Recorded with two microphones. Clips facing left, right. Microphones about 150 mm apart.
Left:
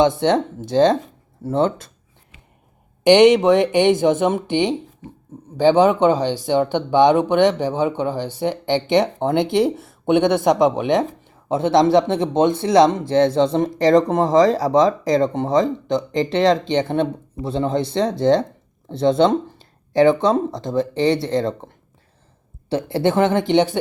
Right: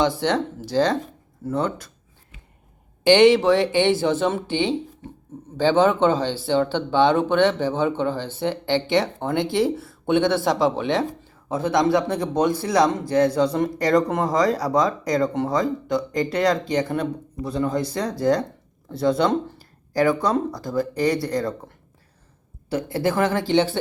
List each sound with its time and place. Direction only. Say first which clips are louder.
0.0 s speech: left 5 dB; 20° left (ahead or behind)
3.0 s speech: left 3 dB; 15° left (ahead or behind)